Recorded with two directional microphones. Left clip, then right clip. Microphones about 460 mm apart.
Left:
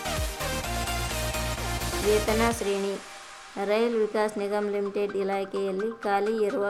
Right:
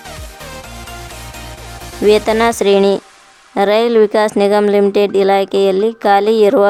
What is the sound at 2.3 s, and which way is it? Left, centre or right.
Speech, centre.